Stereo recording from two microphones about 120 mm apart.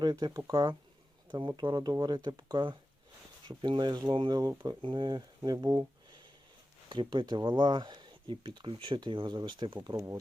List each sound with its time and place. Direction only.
0.0 s speech: 35° right (ahead or behind)